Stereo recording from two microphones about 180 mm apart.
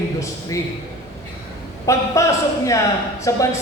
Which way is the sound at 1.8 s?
20° left (ahead or behind).